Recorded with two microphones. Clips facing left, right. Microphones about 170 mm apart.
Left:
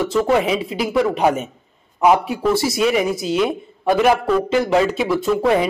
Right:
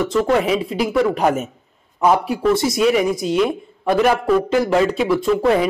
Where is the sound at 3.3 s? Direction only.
Centre (ahead or behind).